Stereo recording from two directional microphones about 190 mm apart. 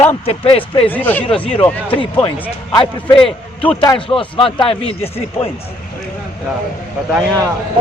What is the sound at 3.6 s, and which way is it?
Speech, 10° left (ahead or behind).